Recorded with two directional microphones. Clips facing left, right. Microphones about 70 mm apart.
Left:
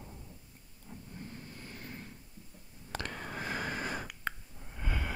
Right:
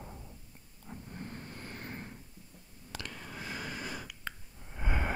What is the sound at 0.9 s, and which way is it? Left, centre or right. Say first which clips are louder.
Vehicle: right 2 dB; right.